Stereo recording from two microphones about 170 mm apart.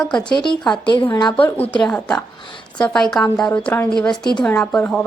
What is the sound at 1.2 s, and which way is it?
Speech, 25° left (ahead or behind).